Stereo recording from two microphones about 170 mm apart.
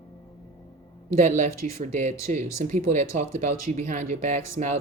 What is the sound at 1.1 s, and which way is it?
Speech, 45° right (ahead or behind).